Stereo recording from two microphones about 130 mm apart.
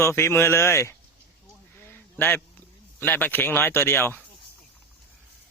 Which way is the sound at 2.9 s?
15° left (ahead or behind).